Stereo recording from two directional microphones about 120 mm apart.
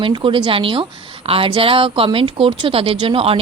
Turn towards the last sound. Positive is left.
turn(degrees=-50)  # may be behind; listen again after turning